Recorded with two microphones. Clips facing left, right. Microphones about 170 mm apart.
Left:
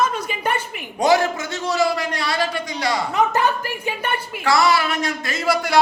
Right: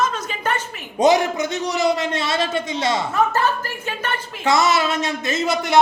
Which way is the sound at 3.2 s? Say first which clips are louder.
Left 2 dB; 15° left (ahead or behind).